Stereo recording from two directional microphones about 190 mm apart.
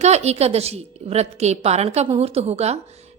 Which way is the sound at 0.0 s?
35° right (ahead or behind).